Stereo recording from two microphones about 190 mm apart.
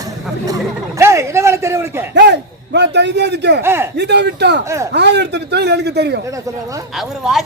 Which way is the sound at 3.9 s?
60° right (ahead or behind).